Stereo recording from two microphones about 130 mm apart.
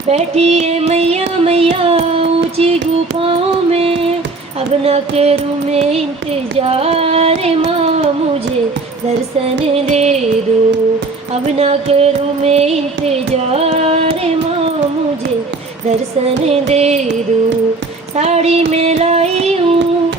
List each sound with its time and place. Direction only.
0.1 s child singing: 55° right (ahead or behind)
3.2 s music: 50° right (ahead or behind)
9.7 s music: 55° right (ahead or behind)
11.4 s music: 50° right (ahead or behind)
16.5 s music: 55° right (ahead or behind)
18.2 s music: 55° right (ahead or behind)